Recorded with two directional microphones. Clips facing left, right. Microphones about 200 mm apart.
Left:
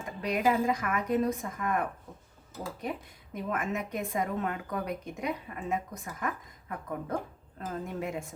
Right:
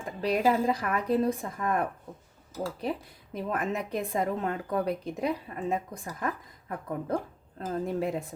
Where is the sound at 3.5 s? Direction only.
35° right (ahead or behind).